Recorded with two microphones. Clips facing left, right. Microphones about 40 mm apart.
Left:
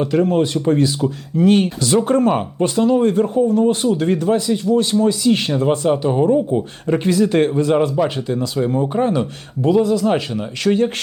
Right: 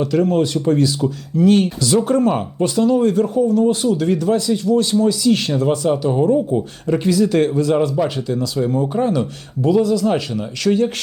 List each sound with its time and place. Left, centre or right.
0.0 s speech: left